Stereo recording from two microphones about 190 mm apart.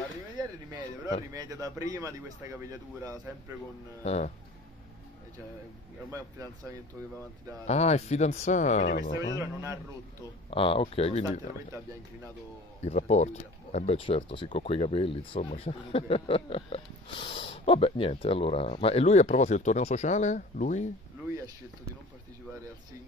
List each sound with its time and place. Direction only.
1.3 s speech: 20° right (ahead or behind)
4.0 s speech: 35° left (ahead or behind)
6.0 s speech: 15° right (ahead or behind)
7.6 s speech: 35° left (ahead or behind)
9.4 s speech: 15° right (ahead or behind)
10.5 s speech: 30° left (ahead or behind)
12.8 s speech: 35° left (ahead or behind)